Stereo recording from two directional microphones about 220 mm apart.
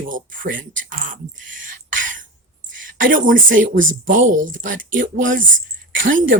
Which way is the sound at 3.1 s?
40° right (ahead or behind).